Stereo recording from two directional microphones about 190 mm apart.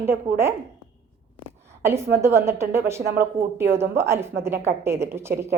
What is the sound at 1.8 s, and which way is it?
A woman's voice, 15° right (ahead or behind).